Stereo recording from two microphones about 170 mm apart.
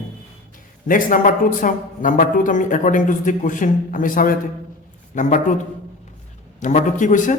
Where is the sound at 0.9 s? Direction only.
50° left (ahead or behind).